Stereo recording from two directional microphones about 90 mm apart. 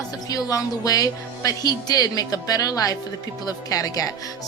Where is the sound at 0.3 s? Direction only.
45° left (ahead or behind).